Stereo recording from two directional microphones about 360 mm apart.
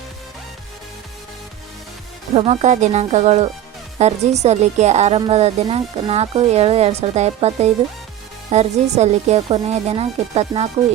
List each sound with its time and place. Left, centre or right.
2.3 s a woman's voice: centre